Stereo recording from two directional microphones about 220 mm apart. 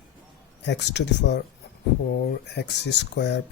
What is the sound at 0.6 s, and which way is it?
Speech, 50° left (ahead or behind).